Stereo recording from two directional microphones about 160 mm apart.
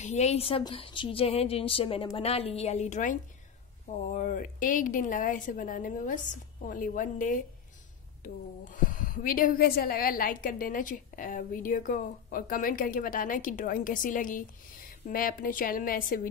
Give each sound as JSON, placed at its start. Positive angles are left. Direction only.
{"t": 0.0, "sound": "a woman's voice", "side_deg": 45}